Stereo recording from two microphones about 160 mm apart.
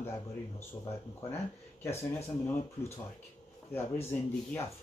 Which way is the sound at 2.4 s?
15° left (ahead or behind).